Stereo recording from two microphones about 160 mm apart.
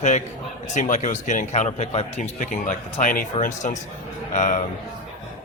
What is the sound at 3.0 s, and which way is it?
Speech, 60° left (ahead or behind).